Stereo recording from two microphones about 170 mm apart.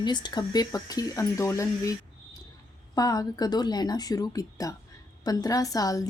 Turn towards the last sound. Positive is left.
turn(degrees=20)  # may be behind; listen again after turning